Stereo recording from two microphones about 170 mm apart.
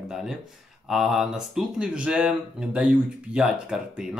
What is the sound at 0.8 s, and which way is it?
Speech, centre (ahead or behind).